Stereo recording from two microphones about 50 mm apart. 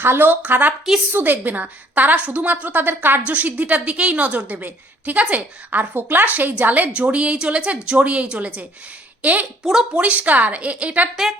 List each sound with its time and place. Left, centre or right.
0.0 s a woman's voice: right
3.2 s a woman's voice: right
5.9 s a woman's voice: right